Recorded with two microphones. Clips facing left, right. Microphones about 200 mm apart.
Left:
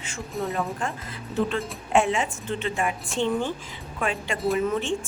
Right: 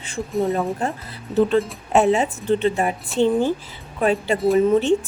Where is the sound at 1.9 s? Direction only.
40° right (ahead or behind).